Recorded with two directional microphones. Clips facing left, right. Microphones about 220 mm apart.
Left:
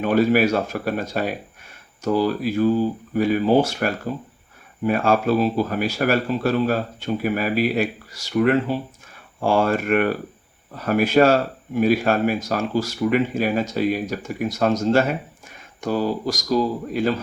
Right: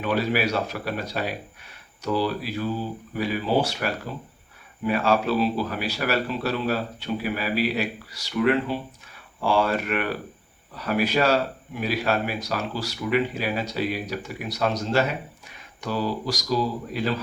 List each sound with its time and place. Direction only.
0.0 s speech: 50° left (ahead or behind)